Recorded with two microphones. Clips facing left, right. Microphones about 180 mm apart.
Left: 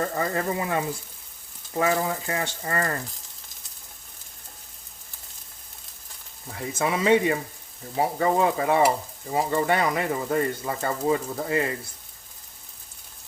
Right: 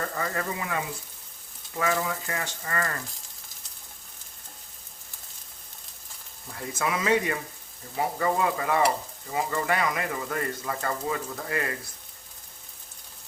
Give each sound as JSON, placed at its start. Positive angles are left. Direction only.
{"t": 0.2, "sound": "frying", "side_deg": 30}
{"t": 6.5, "sound": "speech", "side_deg": 25}